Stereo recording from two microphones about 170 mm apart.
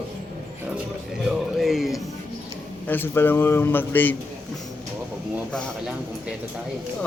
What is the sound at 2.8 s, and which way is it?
A man's voice, 10° left (ahead or behind).